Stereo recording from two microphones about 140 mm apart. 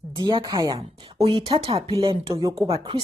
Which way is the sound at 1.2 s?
40° right (ahead or behind).